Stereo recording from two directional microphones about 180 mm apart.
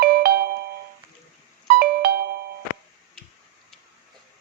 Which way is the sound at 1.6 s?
55° right (ahead or behind).